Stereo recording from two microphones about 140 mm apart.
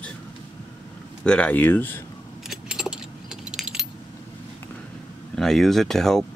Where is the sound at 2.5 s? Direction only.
5° right (ahead or behind).